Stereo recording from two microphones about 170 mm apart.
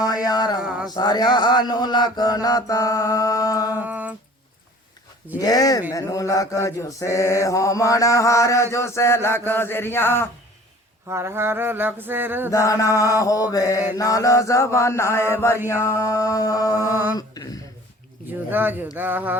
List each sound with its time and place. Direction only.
0.3 s mantra: 25° left (ahead or behind)
0.6 s a sound: 5° right (ahead or behind)
0.9 s mantra: 25° left (ahead or behind)
3.8 s mantra: 10° right (ahead or behind)
5.4 s mantra: 20° left (ahead or behind)
11.1 s mantra: 15° right (ahead or behind)
12.5 s mantra: 20° left (ahead or behind)
17.2 s a sound: 20° left (ahead or behind)
18.3 s mantra: 10° right (ahead or behind)